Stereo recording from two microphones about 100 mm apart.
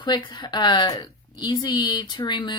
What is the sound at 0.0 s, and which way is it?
Speech, 50° left (ahead or behind).